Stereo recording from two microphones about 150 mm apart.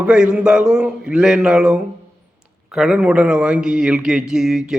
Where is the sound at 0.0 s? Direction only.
5° right (ahead or behind).